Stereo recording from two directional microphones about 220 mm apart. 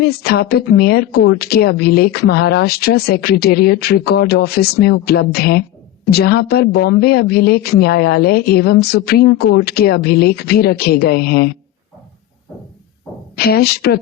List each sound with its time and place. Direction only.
0.0 s a woman's voice: 45° left (ahead or behind)
13.3 s a woman's voice: 45° left (ahead or behind)